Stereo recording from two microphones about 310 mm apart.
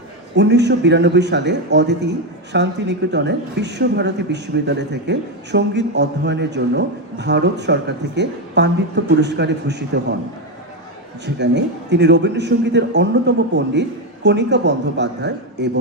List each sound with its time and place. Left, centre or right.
0.3 s a man's voice: right
11.3 s a man's voice: right